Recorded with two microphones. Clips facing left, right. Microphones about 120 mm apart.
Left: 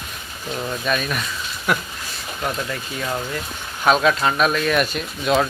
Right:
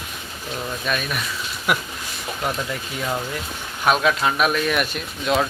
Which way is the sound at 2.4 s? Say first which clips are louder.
Left 1 dB; 10° right (ahead or behind).